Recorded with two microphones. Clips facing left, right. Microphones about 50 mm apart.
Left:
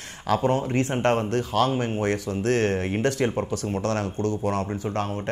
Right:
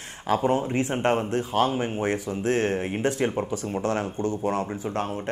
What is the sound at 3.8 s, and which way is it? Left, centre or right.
Speech, centre.